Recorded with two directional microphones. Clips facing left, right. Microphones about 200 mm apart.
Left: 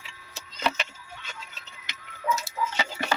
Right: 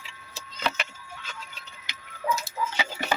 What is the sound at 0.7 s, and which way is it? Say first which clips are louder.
Vehicle: left 2 dB; centre (ahead or behind).